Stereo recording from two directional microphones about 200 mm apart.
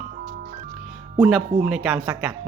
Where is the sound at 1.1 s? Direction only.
5° right (ahead or behind).